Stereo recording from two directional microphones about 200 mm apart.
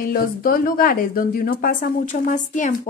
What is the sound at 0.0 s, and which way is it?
A woman's voice, 45° left (ahead or behind).